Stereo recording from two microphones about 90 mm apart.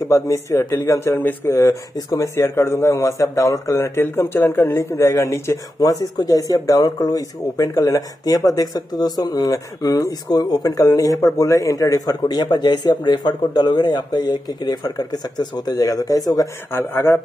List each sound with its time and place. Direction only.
0.1 s a man's voice: 30° left (ahead or behind)
16.7 s a man's voice: 30° left (ahead or behind)